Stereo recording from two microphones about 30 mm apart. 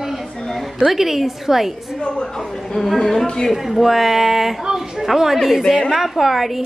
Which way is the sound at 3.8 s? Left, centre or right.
Centre.